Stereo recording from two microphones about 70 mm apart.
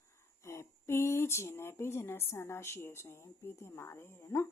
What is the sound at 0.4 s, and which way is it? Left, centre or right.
Speech, left.